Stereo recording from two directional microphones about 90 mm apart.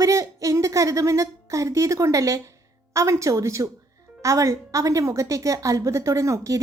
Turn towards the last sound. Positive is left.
turn(degrees=-35)  # may be behind; listen again after turning